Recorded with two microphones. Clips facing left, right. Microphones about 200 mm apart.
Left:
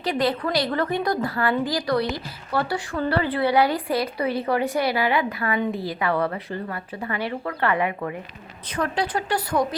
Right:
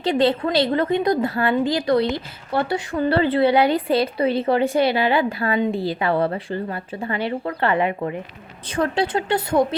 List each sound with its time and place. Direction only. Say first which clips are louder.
0.0 s a woman's voice: right 5 dB; 25° right (ahead or behind)